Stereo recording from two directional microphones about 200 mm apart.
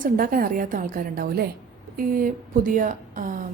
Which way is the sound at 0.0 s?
45° right (ahead or behind).